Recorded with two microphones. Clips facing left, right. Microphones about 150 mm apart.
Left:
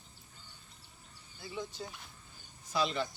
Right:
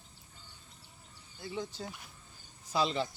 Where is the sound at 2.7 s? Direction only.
30° right (ahead or behind).